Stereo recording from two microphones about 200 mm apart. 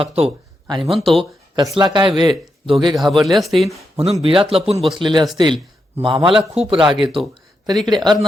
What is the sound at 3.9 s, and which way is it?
Speech, 30° right (ahead or behind).